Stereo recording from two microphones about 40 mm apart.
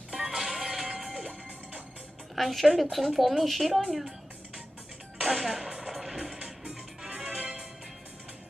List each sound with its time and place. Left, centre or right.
0.1 s music: centre
2.3 s speech: centre
5.2 s music: centre